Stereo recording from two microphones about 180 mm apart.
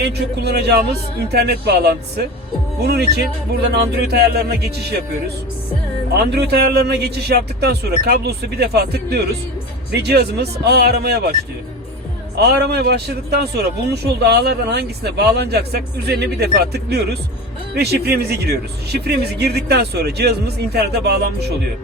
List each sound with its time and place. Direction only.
0.0 s a man's voice: 65° right (ahead or behind)
6.1 s a man's voice: 65° right (ahead or behind)
12.4 s a man's voice: 60° right (ahead or behind)